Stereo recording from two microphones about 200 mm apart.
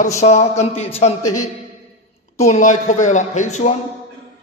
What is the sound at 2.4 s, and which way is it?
A man's voice, 35° left (ahead or behind).